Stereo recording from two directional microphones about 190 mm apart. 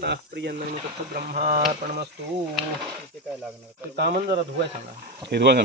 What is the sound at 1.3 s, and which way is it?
Speech, 50° right (ahead or behind).